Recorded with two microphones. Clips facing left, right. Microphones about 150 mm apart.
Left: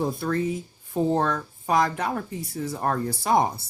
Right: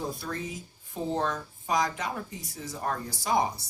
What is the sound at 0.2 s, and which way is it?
Speech, 55° left (ahead or behind).